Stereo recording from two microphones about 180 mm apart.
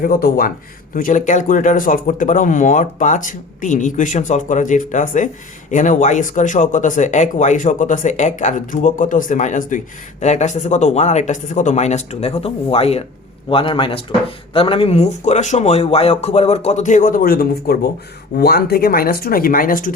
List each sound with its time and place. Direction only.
0.0 s speech: 55° left (ahead or behind)